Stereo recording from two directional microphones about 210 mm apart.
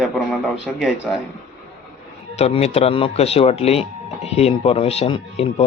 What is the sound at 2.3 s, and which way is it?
Speech, 30° left (ahead or behind).